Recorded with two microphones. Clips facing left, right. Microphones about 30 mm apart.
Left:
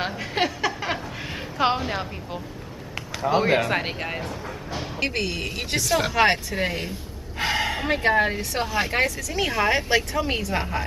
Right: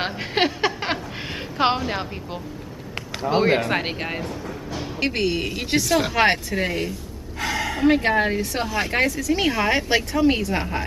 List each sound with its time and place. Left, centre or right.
0.0 s a sound: right
1.9 s speech: centre
7.3 s gasp: left
7.8 s speech: centre